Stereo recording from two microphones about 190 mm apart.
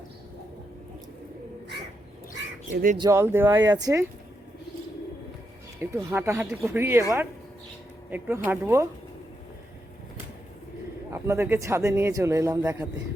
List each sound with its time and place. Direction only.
2.7 s speech: 45° right (ahead or behind)
3.0 s speech: 15° right (ahead or behind)
5.8 s speech: 15° right (ahead or behind)
8.1 s speech: 10° right (ahead or behind)
11.1 s speech: 15° right (ahead or behind)